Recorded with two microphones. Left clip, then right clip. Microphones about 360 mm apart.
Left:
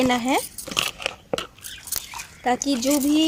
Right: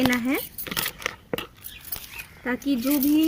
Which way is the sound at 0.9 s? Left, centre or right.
Centre.